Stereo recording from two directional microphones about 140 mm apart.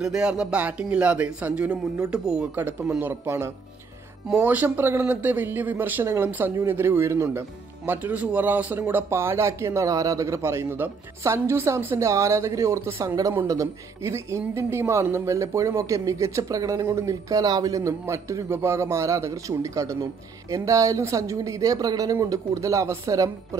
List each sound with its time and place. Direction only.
0.0 s a man's voice: 5° right (ahead or behind); by 23.3 s 20° right (ahead or behind)